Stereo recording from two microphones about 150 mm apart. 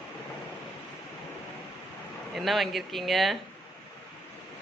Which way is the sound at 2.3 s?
Centre (ahead or behind).